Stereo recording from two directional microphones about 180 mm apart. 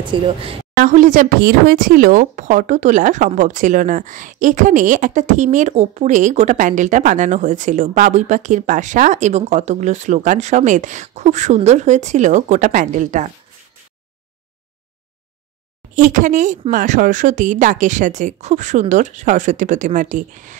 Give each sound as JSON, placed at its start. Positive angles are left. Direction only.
{"t": 0.0, "sound": "speech", "side_deg": -30}
{"t": 0.7, "sound": "speech", "side_deg": -45}
{"t": 15.9, "sound": "speech", "side_deg": -45}